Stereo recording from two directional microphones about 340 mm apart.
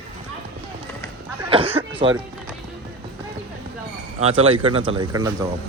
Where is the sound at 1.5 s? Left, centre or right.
Centre.